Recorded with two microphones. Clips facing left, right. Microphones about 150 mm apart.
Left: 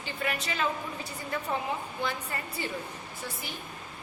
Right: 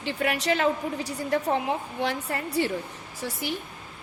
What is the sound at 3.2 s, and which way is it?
Speech, 90° right.